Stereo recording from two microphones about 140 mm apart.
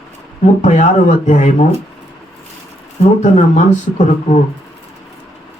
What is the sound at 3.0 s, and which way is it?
Speech, 55° left (ahead or behind).